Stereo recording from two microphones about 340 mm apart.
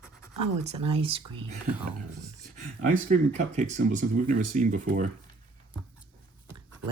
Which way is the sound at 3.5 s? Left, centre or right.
Right.